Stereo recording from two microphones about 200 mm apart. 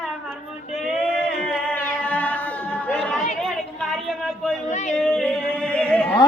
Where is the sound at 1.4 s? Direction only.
5° left (ahead or behind).